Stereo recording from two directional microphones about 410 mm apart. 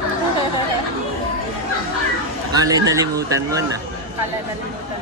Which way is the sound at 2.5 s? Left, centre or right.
Centre.